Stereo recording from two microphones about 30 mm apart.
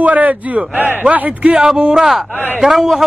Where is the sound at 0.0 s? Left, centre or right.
Right.